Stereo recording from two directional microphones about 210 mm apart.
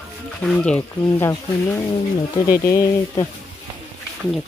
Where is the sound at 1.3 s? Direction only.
15° left (ahead or behind).